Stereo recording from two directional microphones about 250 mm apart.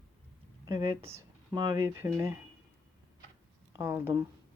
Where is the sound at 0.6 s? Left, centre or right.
Right.